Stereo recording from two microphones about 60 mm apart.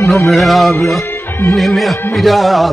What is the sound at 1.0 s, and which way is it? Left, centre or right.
Music, left.